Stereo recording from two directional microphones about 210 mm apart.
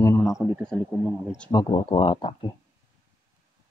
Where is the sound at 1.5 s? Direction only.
20° left (ahead or behind).